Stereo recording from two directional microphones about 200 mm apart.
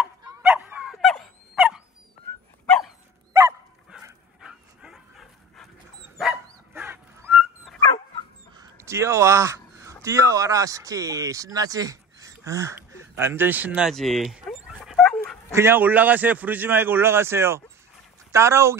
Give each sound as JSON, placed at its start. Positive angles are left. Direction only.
{"t": 0.0, "sound": "dog", "side_deg": -10}
{"t": 4.0, "sound": "dog", "side_deg": -5}
{"t": 8.5, "sound": "a sound", "side_deg": -15}
{"t": 10.0, "sound": "speech", "side_deg": -15}
{"t": 15.5, "sound": "a man's voice", "side_deg": -10}